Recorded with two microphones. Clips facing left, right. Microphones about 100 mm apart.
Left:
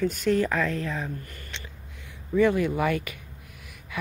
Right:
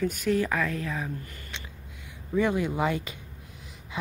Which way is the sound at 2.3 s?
15° right (ahead or behind).